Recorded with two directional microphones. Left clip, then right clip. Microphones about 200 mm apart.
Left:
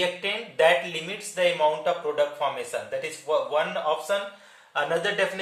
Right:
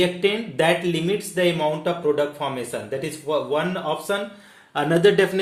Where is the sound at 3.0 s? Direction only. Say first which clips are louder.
Right 1 dB; 40° right (ahead or behind).